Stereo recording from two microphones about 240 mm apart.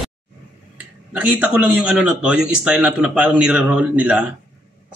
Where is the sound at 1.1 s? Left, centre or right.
Centre.